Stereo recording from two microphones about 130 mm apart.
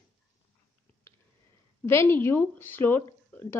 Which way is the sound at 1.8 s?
20° left (ahead or behind).